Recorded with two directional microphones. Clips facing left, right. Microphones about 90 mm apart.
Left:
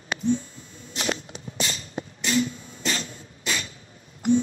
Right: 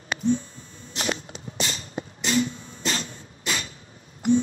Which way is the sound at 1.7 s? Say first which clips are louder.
Even; 35° right (ahead or behind).